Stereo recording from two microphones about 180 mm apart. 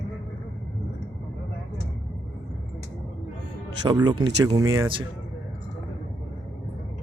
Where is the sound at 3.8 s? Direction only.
25° right (ahead or behind).